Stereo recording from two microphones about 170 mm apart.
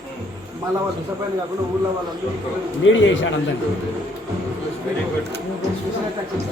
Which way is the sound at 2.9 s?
90° left.